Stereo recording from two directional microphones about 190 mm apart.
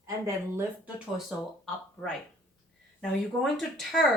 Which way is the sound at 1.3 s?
Centre (ahead or behind).